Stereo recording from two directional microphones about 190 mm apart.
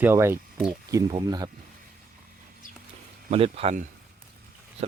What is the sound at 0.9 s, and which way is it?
Speech, 20° right (ahead or behind).